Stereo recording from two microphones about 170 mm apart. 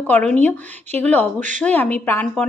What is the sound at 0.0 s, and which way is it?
Speech, 5° left (ahead or behind).